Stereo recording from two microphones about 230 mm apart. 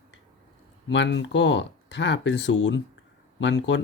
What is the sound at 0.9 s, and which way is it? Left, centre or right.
Speech, left.